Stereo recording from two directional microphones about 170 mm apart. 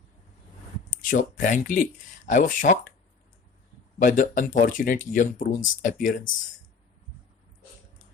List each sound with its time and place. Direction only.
1.1 s speech: 50° left (ahead or behind)
4.0 s speech: 50° left (ahead or behind)